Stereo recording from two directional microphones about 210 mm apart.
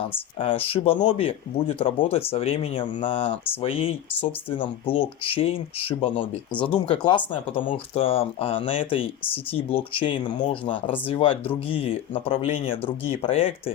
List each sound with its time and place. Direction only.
0.3 s speech: 25° left (ahead or behind)
6.5 s speech: 5° left (ahead or behind)
6.7 s speech: 20° left (ahead or behind)